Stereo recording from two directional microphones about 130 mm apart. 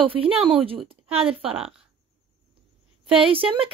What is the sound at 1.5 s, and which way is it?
Speech, 5° right (ahead or behind).